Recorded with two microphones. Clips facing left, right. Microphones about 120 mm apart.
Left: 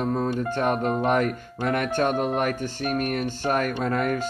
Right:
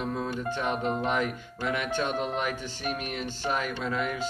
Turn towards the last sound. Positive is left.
turn(degrees=50)  # may be behind; listen again after turning